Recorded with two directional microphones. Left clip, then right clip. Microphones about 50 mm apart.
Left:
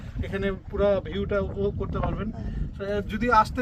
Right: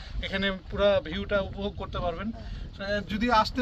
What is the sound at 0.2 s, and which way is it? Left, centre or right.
Speech, centre.